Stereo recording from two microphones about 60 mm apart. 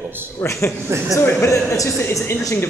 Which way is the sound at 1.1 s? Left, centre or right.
Left.